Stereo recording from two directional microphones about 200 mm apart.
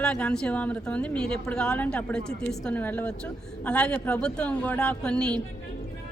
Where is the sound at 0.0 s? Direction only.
5° left (ahead or behind).